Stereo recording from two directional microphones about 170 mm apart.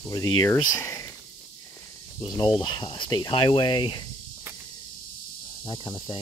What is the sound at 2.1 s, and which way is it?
Speech, 25° left (ahead or behind).